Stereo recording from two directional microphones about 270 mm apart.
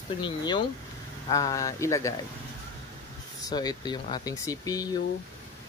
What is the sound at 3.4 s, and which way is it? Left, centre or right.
Speech, centre.